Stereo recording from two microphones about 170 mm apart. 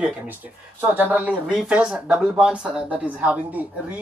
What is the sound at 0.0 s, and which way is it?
Speech, 10° right (ahead or behind).